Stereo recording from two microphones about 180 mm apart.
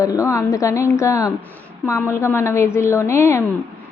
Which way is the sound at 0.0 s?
20° left (ahead or behind).